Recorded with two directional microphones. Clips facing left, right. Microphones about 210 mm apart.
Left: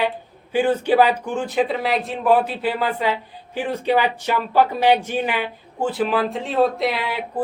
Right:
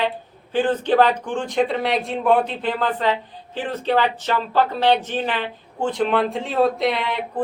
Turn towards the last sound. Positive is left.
turn(degrees=5)  # may be behind; listen again after turning